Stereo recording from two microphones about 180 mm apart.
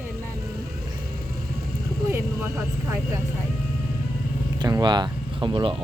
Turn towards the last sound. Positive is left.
turn(degrees=-30)  # may be behind; listen again after turning